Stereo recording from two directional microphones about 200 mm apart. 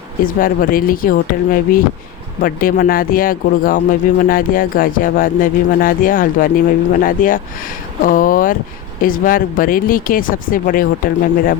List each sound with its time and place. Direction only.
0.3 s speech: 45° left (ahead or behind)